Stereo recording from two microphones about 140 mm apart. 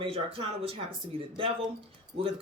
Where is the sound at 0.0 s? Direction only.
40° right (ahead or behind).